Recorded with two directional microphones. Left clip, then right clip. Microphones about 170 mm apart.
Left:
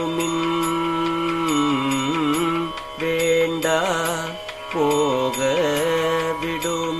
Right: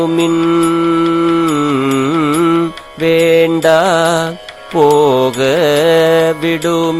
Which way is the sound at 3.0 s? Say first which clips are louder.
Right 10 dB; 65° right (ahead or behind).